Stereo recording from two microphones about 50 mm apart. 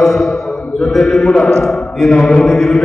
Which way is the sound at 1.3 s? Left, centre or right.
Centre.